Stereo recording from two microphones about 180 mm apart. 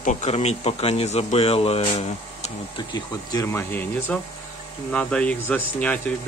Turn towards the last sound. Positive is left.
turn(degrees=5)  # may be behind; listen again after turning